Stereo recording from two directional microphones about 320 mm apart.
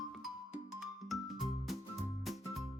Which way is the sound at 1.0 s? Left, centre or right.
Centre.